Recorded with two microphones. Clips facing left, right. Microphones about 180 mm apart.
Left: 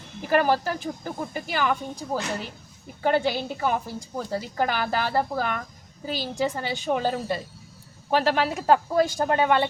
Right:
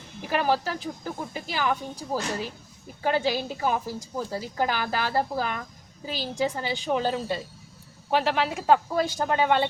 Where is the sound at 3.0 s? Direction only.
55° left (ahead or behind).